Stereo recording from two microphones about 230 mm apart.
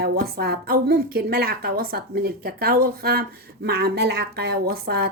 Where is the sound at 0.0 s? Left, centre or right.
Right.